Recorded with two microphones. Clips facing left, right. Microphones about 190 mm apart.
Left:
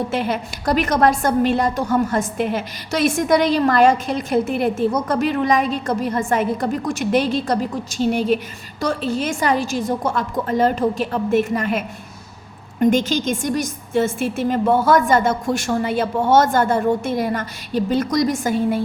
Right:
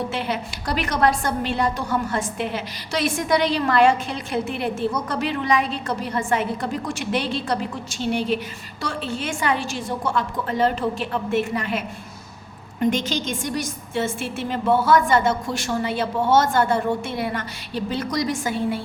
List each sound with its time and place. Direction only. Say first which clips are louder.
0.1 s a woman's voice: left 4 dB; 45° left (ahead or behind)
12.8 s a woman's voice: left 5 dB; 45° left (ahead or behind)